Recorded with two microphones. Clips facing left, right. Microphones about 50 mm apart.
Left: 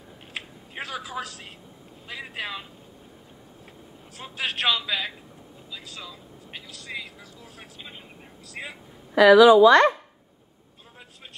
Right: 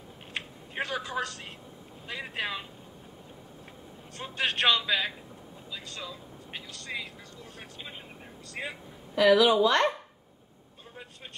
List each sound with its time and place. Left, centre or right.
0.3 s a sound: centre
2.0 s a man's voice: centre
4.2 s a man's voice: centre
8.6 s a man's voice: centre
9.2 s a woman's voice: left